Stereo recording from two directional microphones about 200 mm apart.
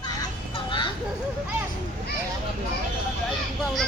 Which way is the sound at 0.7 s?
25° left (ahead or behind).